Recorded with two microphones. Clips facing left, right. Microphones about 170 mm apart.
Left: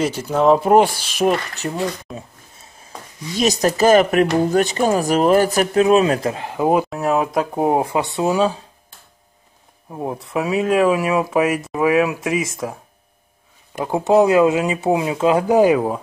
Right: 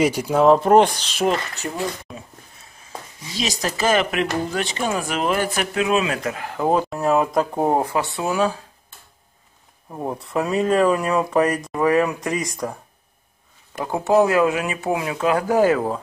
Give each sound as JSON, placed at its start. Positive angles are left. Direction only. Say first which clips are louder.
{"t": 0.0, "sound": "speech", "louder": "right 1 dB", "side_deg": -10}
{"t": 0.6, "sound": "speech", "louder": "left 1 dB", "side_deg": 5}
{"t": 2.1, "sound": "speech", "louder": "left 4 dB", "side_deg": -5}
{"t": 3.3, "sound": "speech", "louder": "left 8 dB", "side_deg": 50}
{"t": 6.4, "sound": "speech", "louder": "left 1 dB", "side_deg": 15}
{"t": 6.9, "sound": "speech", "louder": "even", "side_deg": 0}
{"t": 9.8, "sound": "speech", "louder": "left 2 dB", "side_deg": 5}
{"t": 13.7, "sound": "speech", "louder": "left 3 dB", "side_deg": 20}